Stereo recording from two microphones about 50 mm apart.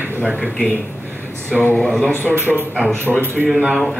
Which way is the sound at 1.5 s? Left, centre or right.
Left.